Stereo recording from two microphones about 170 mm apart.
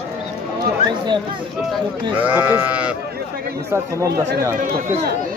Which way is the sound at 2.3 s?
10° right (ahead or behind).